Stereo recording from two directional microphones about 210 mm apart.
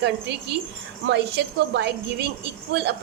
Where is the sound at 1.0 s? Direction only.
55° right (ahead or behind).